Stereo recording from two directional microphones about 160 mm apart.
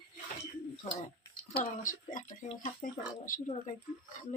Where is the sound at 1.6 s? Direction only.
55° left (ahead or behind).